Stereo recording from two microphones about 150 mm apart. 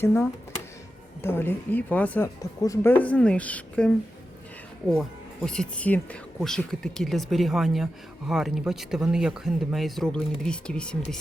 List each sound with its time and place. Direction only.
0.0 s speech: 15° left (ahead or behind)